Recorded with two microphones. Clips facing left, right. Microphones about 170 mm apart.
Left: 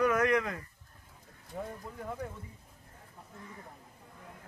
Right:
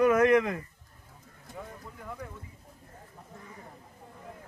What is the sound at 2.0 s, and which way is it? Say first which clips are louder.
Speech: left 2 dB; 30° left (ahead or behind).